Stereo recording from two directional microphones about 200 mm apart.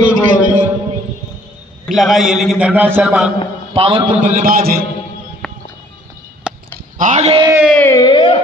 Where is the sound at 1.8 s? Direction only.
Centre (ahead or behind).